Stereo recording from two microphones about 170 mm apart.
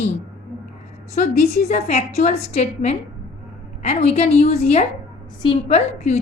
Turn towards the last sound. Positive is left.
turn(degrees=40)  # may be behind; listen again after turning